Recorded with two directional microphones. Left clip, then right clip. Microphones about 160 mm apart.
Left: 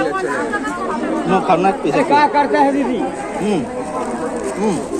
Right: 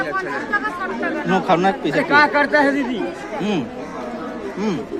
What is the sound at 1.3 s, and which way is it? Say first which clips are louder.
Speech: left 3 dB; 70° right (ahead or behind).